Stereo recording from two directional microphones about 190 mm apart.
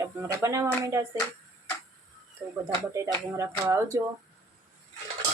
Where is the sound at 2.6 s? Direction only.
15° right (ahead or behind).